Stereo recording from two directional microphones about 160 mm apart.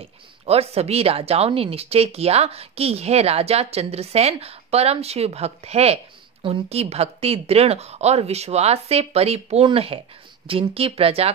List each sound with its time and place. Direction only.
0.0 s a woman's voice: 40° right (ahead or behind)